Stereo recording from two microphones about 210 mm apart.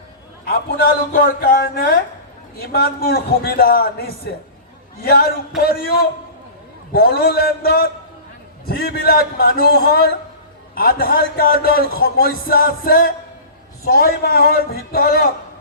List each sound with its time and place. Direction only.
0.4 s speech: 45° left (ahead or behind)